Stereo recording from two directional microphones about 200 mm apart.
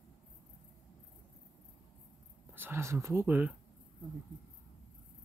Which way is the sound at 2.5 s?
10° right (ahead or behind).